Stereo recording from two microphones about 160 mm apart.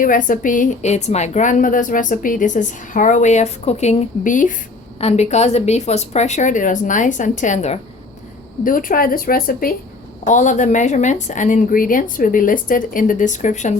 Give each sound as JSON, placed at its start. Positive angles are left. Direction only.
{"t": 0.0, "sound": "a woman's voice", "side_deg": 55}
{"t": 4.9, "sound": "a woman's voice", "side_deg": 45}
{"t": 8.6, "sound": "speech", "side_deg": 60}
{"t": 10.2, "sound": "a woman's voice", "side_deg": 50}